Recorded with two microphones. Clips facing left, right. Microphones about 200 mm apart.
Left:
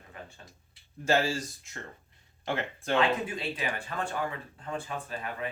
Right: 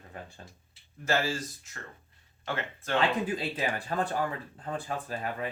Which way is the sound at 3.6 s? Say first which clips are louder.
Right 3 dB; 40° right (ahead or behind).